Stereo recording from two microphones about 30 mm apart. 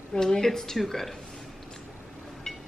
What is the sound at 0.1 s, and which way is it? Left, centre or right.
Speech, left.